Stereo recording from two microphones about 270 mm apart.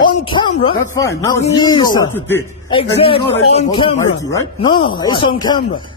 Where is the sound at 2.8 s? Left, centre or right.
Centre.